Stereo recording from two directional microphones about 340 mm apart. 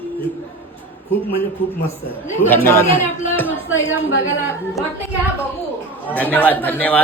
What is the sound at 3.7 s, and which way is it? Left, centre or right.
Speech, left.